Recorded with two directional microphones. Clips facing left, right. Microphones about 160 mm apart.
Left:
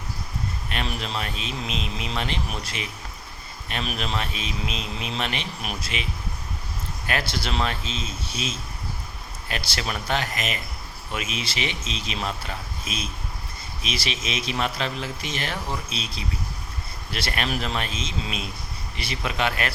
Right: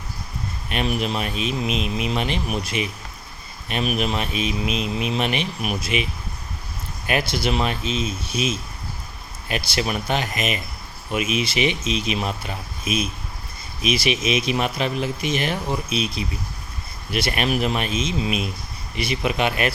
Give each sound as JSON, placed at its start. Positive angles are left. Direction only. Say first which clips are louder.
{"t": 0.7, "sound": "a man's voice", "louder": "right 7 dB", "side_deg": -15}
{"t": 7.1, "sound": "a man's voice", "louder": "right 6 dB", "side_deg": -15}